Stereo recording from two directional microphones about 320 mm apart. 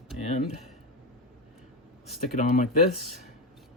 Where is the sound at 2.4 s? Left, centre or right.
Left.